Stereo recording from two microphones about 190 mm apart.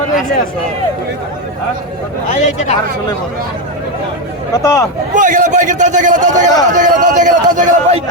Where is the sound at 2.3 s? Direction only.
40° left (ahead or behind).